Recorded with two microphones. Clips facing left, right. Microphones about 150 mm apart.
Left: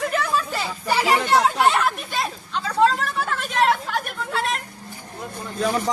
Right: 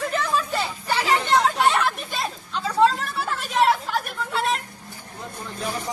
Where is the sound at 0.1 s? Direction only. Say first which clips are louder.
Left 1 dB; 5° left (ahead or behind).